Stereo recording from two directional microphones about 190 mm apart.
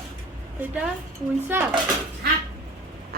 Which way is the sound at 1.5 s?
10° right (ahead or behind).